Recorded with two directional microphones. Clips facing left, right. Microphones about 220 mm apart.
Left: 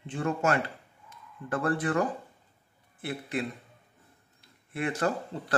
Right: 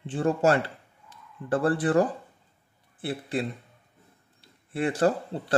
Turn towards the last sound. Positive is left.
turn(degrees=-30)  # may be behind; listen again after turning